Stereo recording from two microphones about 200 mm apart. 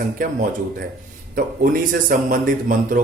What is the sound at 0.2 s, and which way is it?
A man's voice, 45° right (ahead or behind).